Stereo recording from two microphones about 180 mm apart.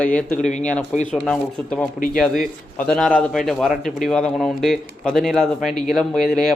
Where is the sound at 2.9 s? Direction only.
5° left (ahead or behind).